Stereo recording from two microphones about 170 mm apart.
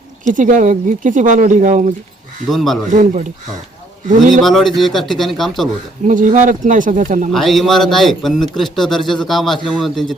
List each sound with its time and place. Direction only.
0.3 s speech: 50° right (ahead or behind)
2.5 s a man's voice: centre (ahead or behind)
2.9 s speech: 50° right (ahead or behind)
4.3 s a man's voice: centre (ahead or behind)
6.1 s speech: 50° right (ahead or behind)
7.3 s a man's voice: centre (ahead or behind)